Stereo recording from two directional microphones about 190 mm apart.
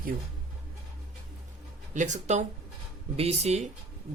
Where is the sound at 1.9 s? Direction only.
40° right (ahead or behind).